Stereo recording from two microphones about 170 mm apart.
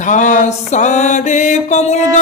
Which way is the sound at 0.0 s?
45° left (ahead or behind).